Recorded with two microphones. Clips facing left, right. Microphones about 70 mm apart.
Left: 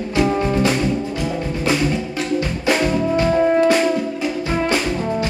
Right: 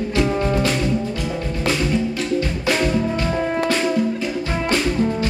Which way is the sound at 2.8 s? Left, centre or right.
Centre.